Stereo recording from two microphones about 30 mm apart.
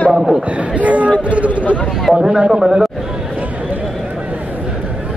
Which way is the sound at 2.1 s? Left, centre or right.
Right.